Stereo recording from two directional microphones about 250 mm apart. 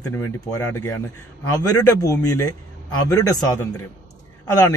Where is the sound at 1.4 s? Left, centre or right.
Left.